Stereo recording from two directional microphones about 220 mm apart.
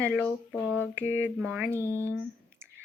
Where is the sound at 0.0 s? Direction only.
5° left (ahead or behind).